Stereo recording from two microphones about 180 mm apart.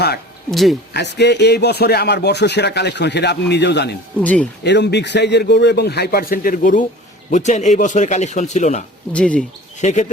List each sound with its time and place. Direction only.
0.5 s speech: centre (ahead or behind)
0.9 s speech: 70° left (ahead or behind)
4.2 s speech: 10° left (ahead or behind)
4.6 s speech: 70° left (ahead or behind); by 8.8 s 40° left (ahead or behind)
9.1 s speech: 5° left (ahead or behind)
9.7 s speech: 40° left (ahead or behind)